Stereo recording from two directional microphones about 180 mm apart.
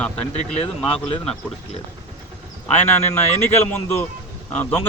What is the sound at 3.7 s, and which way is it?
Speech, 15° left (ahead or behind).